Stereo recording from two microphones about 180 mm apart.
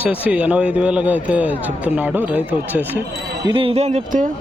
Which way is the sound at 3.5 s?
30° right (ahead or behind).